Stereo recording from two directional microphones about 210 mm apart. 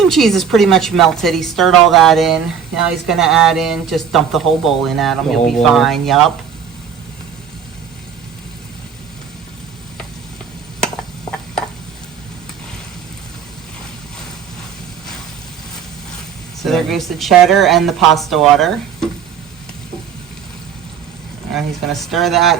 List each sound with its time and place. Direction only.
0.0 s speech: centre (ahead or behind)
16.6 s speech: centre (ahead or behind)
21.5 s speech: centre (ahead or behind)